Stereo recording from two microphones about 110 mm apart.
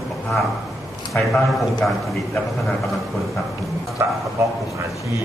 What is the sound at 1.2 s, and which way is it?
Speech, 20° left (ahead or behind).